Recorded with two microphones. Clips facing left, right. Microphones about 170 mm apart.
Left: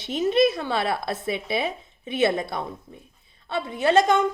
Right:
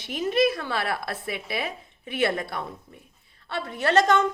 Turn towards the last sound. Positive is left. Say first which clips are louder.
# left 2 dB
turn(degrees=15)  # may be behind; listen again after turning